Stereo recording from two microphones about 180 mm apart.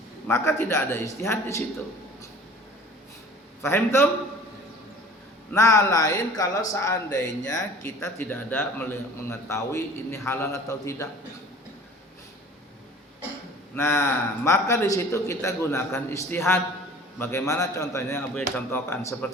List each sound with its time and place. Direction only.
0.3 s a man's voice: 15° left (ahead or behind)
3.6 s a man's voice: 15° left (ahead or behind)
5.5 s a man's voice: 15° left (ahead or behind)
13.7 s a man's voice: 15° left (ahead or behind)